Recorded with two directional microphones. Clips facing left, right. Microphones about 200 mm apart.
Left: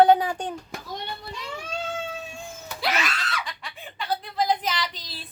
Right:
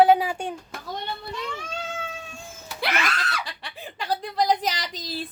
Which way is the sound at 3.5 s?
35° right (ahead or behind).